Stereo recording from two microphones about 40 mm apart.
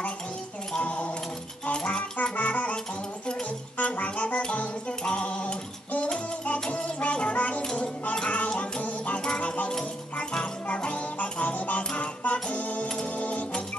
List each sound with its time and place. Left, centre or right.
0.8 s a sound: left
2.2 s music: left
5.3 s mechanisms: left
6.7 s music: left
7.7 s a sound: left
8.8 s music: left
10.3 s music: left